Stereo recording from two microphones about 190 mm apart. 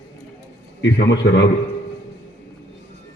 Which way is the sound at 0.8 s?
70° left (ahead or behind).